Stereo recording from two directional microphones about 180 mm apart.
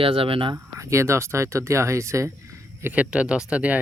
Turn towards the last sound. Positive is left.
turn(degrees=-5)  # may be behind; listen again after turning